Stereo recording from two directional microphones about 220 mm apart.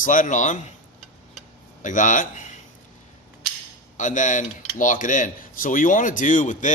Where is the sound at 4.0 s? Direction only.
35° left (ahead or behind).